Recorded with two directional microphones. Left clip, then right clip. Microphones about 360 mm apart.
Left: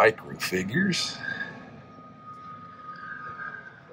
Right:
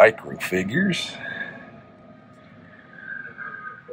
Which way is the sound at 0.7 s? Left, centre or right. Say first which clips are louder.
Right 3 dB; left.